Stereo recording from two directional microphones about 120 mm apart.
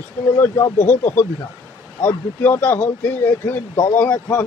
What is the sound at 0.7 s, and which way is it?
Speech, 90° left.